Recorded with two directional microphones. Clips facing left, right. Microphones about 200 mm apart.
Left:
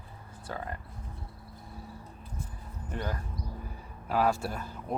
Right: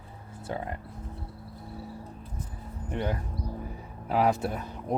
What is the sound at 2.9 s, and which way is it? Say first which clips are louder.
Speech: right 5 dB; 20° right (ahead or behind).